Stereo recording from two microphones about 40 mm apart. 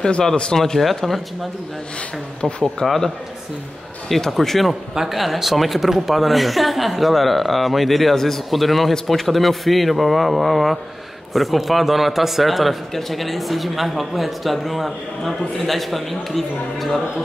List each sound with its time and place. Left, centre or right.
0.4 s speech: centre
0.7 s a man's voice: centre
2.4 s speech: centre
4.1 s a man's voice: centre